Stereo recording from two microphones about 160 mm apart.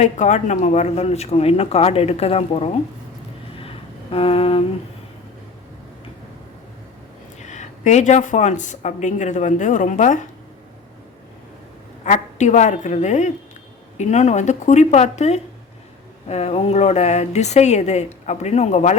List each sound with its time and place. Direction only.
0.0 s speech: 45° left (ahead or behind)
4.1 s humming: 35° left (ahead or behind)
7.3 s speech: 45° left (ahead or behind)
12.0 s speech: 50° left (ahead or behind)